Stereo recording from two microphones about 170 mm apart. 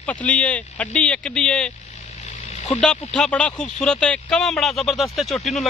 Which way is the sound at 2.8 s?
5° left (ahead or behind).